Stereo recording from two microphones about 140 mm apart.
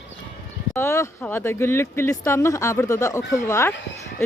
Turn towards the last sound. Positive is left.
turn(degrees=20)  # may be behind; listen again after turning